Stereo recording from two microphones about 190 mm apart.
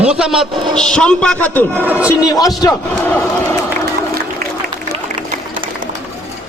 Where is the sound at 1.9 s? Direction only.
5° right (ahead or behind).